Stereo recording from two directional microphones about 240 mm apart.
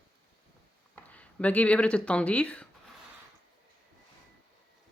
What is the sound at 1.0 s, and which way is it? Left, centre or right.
Speech, centre.